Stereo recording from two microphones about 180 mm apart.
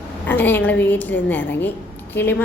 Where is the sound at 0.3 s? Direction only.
10° left (ahead or behind).